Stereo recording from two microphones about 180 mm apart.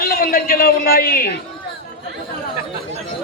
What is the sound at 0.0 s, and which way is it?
A man's voice, 55° left (ahead or behind).